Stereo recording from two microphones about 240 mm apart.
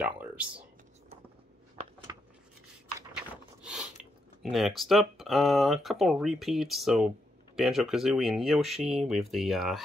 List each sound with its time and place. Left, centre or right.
0.0 s speech: centre
3.6 s a sound: centre
4.0 s speech: centre